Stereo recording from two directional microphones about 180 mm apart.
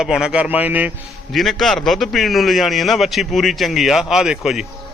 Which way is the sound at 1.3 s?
Centre (ahead or behind).